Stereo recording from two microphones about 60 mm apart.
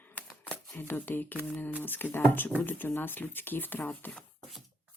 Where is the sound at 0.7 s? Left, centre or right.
Left.